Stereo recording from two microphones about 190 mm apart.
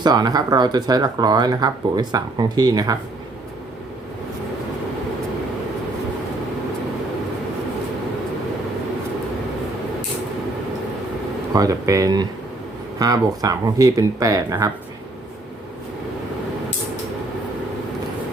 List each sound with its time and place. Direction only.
0.0 s speech: 20° right (ahead or behind)
11.5 s speech: 20° right (ahead or behind)